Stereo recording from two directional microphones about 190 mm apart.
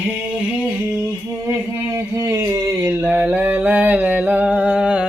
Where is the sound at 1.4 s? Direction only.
15° right (ahead or behind).